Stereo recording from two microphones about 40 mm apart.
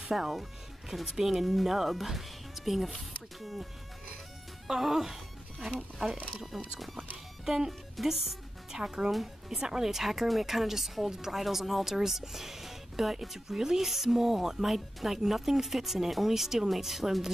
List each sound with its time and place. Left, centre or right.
0.1 s speech: centre
4.6 s a woman's voice: centre
8.7 s a woman's voice: centre
9.1 s speech: centre
9.6 s a woman's voice: centre